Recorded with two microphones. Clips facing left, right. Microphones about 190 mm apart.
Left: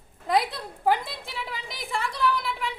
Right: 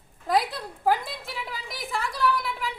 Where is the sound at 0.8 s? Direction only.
Centre (ahead or behind).